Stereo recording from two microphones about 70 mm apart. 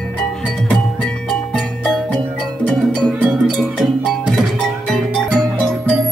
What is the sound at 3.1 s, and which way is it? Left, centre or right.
Music, right.